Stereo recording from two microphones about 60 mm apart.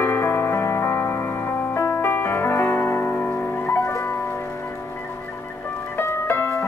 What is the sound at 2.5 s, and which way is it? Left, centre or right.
Music, left.